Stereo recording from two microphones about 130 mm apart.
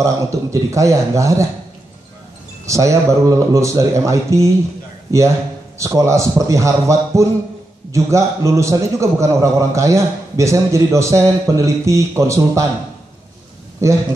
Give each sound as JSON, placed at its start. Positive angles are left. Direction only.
{"t": 0.0, "sound": "a man's voice", "side_deg": -25}
{"t": 2.6, "sound": "a man's voice", "side_deg": -25}